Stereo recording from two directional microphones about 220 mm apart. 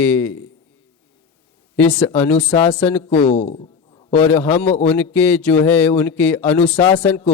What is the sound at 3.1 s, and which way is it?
Speech, 30° left (ahead or behind).